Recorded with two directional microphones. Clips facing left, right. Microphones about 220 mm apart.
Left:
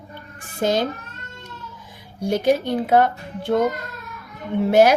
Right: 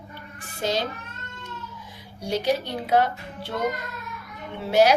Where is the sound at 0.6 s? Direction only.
50° left (ahead or behind).